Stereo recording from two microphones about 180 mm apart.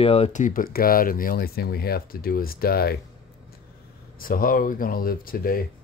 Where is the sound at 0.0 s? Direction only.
35° left (ahead or behind); by 3.0 s 60° left (ahead or behind).